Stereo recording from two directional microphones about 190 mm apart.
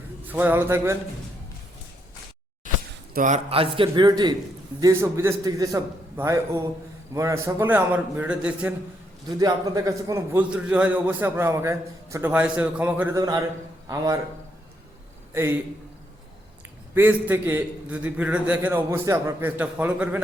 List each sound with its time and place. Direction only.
0.3 s a man's voice: 10° right (ahead or behind)
3.2 s a man's voice: 40° right (ahead or behind); by 8.7 s 5° right (ahead or behind)
9.4 s a man's voice: 15° right (ahead or behind)
15.3 s a man's voice: 10° right (ahead or behind)
16.9 s a man's voice: 10° right (ahead or behind)